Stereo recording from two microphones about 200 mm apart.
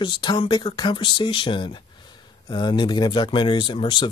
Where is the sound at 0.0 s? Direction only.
25° left (ahead or behind).